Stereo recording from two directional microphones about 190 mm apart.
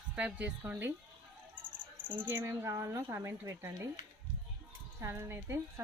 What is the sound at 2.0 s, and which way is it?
Speech, 10° right (ahead or behind).